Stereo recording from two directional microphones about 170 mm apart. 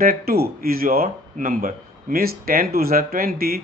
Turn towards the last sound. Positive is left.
turn(degrees=-60)  # may be behind; listen again after turning